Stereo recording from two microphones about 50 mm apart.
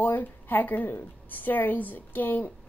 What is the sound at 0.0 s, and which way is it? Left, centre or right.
A woman's voice, left.